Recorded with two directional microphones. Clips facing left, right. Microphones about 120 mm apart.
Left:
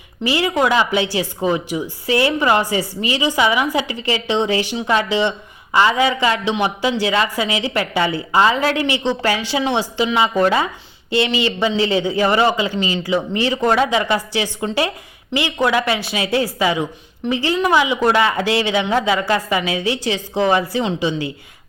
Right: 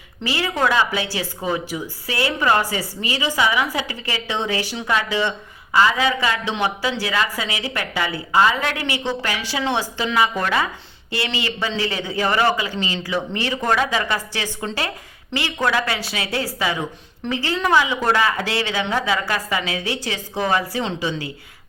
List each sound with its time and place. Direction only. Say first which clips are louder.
0.2 s a woman's voice: left 4 dB; 15° left (ahead or behind)